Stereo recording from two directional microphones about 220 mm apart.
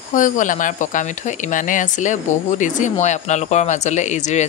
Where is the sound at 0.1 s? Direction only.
35° left (ahead or behind).